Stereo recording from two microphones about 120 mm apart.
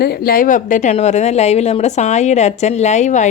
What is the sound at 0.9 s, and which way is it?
A woman's voice, 70° left (ahead or behind).